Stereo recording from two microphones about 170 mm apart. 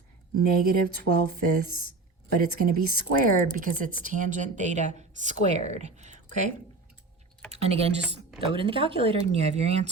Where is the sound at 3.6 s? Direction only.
50° right (ahead or behind).